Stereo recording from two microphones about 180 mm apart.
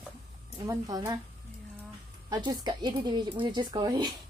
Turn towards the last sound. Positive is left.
turn(degrees=-25)  # may be behind; listen again after turning